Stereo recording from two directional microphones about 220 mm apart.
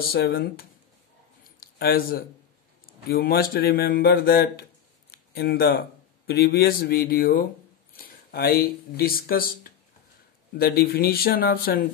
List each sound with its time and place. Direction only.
0.0 s a man's voice: 45° left (ahead or behind)